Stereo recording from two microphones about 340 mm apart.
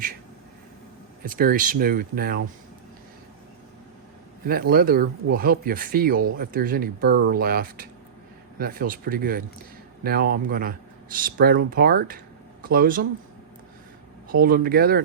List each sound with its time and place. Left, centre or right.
1.2 s speech: right
4.4 s speech: right
14.3 s speech: right